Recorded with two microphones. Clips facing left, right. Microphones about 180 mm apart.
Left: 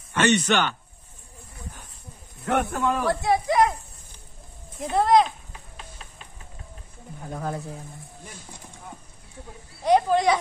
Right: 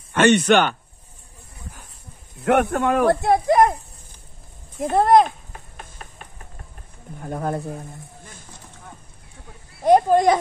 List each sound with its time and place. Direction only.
0.1 s speech: 55° right (ahead or behind)
2.4 s speech: 70° right (ahead or behind); by 3.7 s 50° right (ahead or behind)
4.7 s a sound: 50° right (ahead or behind)
7.2 s speech: 55° right (ahead or behind)
9.8 s speech: 50° right (ahead or behind)